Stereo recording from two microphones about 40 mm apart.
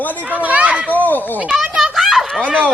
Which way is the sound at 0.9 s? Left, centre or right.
Left.